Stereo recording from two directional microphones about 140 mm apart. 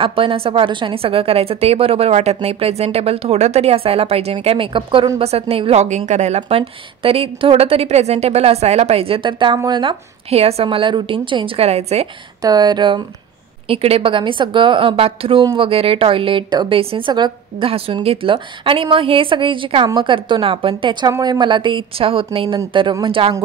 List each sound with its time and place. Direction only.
0.0 s a woman's voice: 40° right (ahead or behind)
12.4 s a woman's voice: 30° right (ahead or behind)
13.7 s a woman's voice: 45° right (ahead or behind)